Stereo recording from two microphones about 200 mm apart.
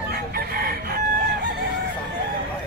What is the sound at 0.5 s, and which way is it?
Chicken, 45° right (ahead or behind).